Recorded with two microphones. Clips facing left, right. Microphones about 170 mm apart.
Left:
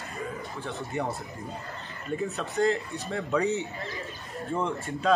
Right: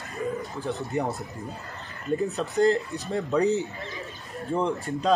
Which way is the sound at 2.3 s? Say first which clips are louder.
Right 3 dB; 35° right (ahead or behind).